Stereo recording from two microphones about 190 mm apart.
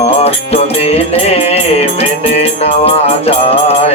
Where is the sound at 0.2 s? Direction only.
35° left (ahead or behind).